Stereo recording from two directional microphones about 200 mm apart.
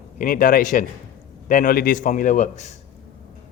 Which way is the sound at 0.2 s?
45° left (ahead or behind).